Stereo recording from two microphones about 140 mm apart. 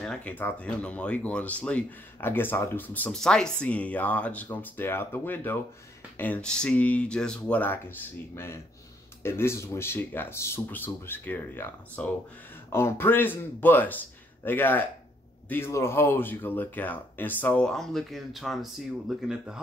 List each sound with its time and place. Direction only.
0.0 s speech: 5° left (ahead or behind)